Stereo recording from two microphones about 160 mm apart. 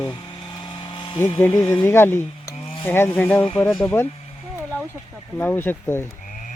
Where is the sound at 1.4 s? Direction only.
15° left (ahead or behind).